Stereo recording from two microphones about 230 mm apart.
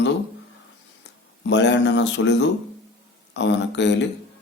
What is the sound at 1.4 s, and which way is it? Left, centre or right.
A man's voice, left.